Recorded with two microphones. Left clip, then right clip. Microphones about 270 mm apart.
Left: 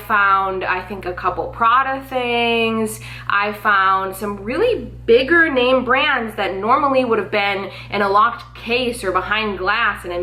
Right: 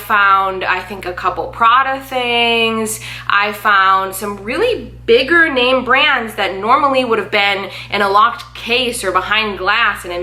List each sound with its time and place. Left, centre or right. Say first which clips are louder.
0.1 s speech: right 4 dB; centre
1.3 s a woman's voice: right 2 dB; centre
1.6 s speech: right 4 dB; centre